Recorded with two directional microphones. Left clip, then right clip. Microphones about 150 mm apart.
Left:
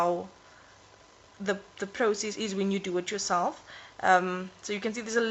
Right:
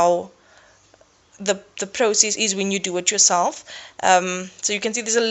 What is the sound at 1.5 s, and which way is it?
Speech, 15° right (ahead or behind).